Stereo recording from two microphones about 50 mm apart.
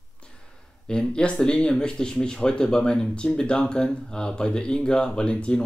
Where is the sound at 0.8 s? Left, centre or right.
Centre.